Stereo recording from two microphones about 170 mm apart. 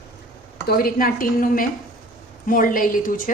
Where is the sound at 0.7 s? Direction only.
60° left (ahead or behind).